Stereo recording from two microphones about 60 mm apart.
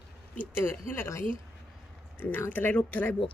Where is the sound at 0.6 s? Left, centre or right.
Left.